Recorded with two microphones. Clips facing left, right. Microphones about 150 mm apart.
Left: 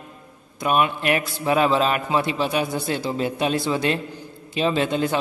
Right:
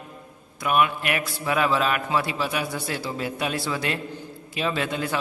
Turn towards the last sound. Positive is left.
turn(degrees=25)  # may be behind; listen again after turning